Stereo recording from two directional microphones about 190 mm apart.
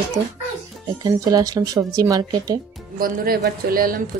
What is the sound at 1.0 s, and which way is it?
Speech, 20° right (ahead or behind).